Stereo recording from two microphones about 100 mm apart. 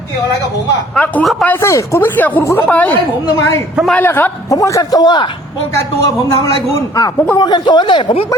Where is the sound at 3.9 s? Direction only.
20° left (ahead or behind).